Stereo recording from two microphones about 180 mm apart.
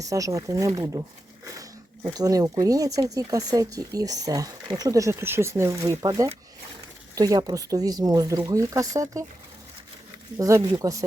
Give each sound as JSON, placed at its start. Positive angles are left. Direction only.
{"t": 0.0, "sound": "speech", "side_deg": -20}
{"t": 2.0, "sound": "speech", "side_deg": -20}
{"t": 10.3, "sound": "speech", "side_deg": -20}